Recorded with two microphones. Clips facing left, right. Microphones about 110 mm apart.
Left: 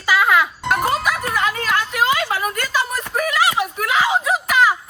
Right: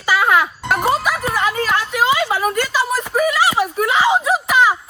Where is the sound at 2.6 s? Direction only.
10° right (ahead or behind).